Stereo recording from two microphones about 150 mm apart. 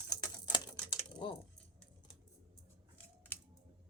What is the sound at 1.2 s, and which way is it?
Speech, 35° left (ahead or behind).